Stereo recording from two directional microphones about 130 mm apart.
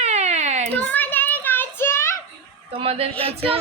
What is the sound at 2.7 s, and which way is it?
Speech, 45° right (ahead or behind).